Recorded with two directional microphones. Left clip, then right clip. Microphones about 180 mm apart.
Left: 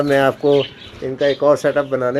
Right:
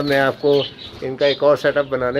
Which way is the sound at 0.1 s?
35° left (ahead or behind).